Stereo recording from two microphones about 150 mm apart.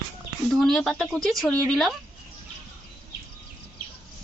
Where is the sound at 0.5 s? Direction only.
5° left (ahead or behind).